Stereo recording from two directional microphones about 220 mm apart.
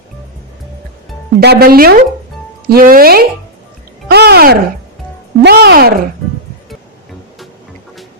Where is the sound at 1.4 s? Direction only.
45° right (ahead or behind).